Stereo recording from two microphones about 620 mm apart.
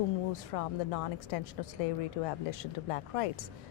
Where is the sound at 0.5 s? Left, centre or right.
Left.